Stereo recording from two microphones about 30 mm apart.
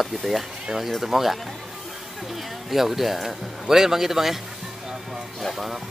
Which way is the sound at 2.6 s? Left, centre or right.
Centre.